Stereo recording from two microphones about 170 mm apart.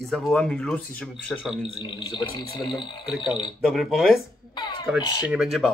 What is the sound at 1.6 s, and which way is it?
Speech, 30° left (ahead or behind).